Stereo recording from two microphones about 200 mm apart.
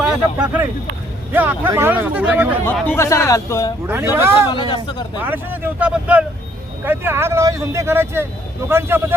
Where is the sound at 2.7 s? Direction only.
10° left (ahead or behind).